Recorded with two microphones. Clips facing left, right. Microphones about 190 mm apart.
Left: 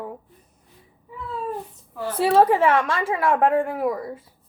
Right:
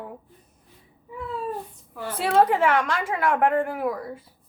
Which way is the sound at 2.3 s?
30° left (ahead or behind).